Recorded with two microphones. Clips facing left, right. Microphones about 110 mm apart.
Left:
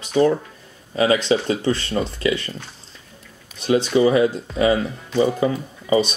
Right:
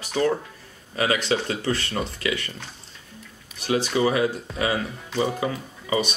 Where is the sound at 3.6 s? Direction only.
25° left (ahead or behind).